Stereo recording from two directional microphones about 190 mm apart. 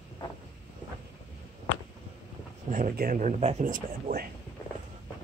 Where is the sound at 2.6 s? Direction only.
45° right (ahead or behind).